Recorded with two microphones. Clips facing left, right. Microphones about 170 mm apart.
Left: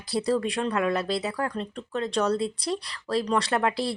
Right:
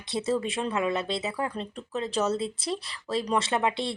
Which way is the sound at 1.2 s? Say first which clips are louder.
Left 2 dB; 25° right (ahead or behind).